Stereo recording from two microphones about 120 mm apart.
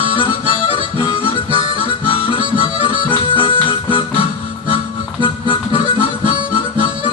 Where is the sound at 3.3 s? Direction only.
45° left (ahead or behind).